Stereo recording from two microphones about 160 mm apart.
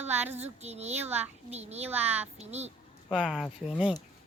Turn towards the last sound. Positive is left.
turn(degrees=-5)  # may be behind; listen again after turning